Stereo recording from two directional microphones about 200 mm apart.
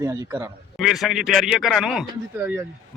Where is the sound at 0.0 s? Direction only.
15° right (ahead or behind).